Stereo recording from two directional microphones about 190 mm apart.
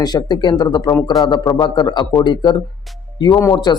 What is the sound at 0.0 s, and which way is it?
A man's voice, 20° left (ahead or behind).